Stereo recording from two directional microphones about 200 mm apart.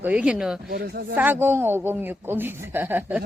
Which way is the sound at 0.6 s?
50° right (ahead or behind).